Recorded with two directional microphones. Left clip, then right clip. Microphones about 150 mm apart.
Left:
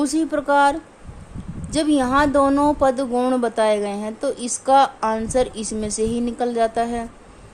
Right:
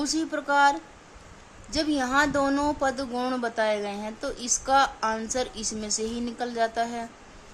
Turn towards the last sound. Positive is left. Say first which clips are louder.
# left 6 dB
turn(degrees=40)  # may be behind; listen again after turning